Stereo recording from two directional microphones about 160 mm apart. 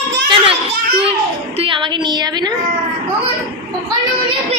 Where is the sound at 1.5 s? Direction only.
30° right (ahead or behind).